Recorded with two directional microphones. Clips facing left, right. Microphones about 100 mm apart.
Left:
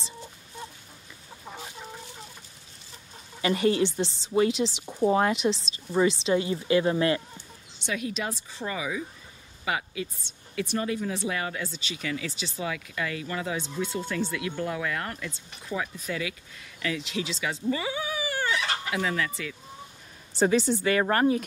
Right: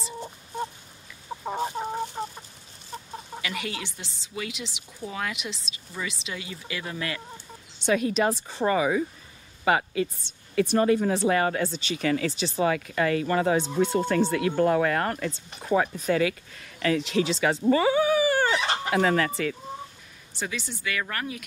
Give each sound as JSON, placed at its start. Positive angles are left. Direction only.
{"t": 1.4, "sound": "chicken", "side_deg": -45}
{"t": 3.4, "sound": "speech", "side_deg": 35}
{"t": 7.8, "sound": "speech", "side_deg": -45}
{"t": 18.9, "sound": "speech", "side_deg": -50}
{"t": 20.3, "sound": "speech", "side_deg": 35}